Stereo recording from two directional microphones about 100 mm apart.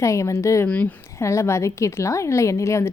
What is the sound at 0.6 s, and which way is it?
Speech, 15° left (ahead or behind).